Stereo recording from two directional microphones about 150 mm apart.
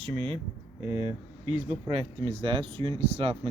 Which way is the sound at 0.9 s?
40° left (ahead or behind).